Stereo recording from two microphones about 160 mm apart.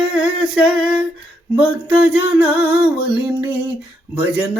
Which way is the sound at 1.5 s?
10° right (ahead or behind).